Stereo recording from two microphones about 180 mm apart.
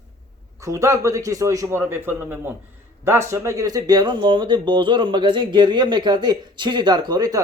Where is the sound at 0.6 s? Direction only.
15° right (ahead or behind).